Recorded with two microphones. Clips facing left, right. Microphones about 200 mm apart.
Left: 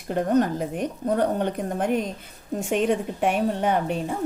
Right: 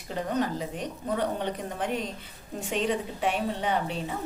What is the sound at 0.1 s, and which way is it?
A woman's voice, 50° left (ahead or behind).